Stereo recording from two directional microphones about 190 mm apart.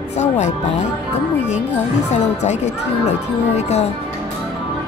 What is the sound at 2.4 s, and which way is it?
Speech, 35° left (ahead or behind).